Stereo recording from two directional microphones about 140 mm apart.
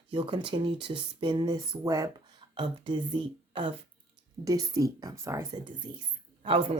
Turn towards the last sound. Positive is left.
turn(degrees=-40)  # may be behind; listen again after turning